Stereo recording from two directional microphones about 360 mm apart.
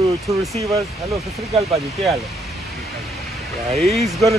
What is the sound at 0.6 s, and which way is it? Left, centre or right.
Speech, centre.